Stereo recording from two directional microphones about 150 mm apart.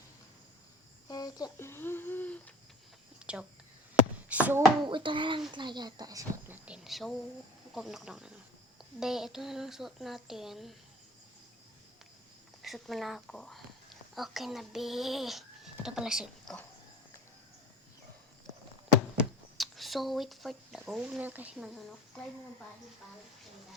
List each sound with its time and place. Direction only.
1.0 s a sound: 25° left (ahead or behind)
3.3 s speech: 10° right (ahead or behind)
4.9 s a child's voice: 35° right (ahead or behind)
6.5 s speech: 5° right (ahead or behind)
12.6 s speech: centre (ahead or behind)
19.1 s speech: centre (ahead or behind)
22.1 s speech: 5° left (ahead or behind)